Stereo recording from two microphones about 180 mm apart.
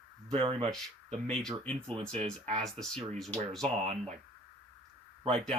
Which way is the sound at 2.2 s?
35° right (ahead or behind).